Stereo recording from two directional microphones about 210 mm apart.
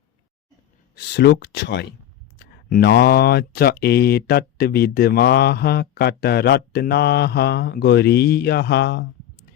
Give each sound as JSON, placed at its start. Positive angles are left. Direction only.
{"t": 0.9, "sound": "speech", "side_deg": 55}